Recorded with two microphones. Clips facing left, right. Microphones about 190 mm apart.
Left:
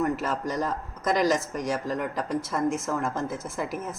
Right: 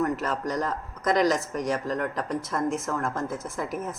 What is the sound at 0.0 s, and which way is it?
Speech, 5° left (ahead or behind).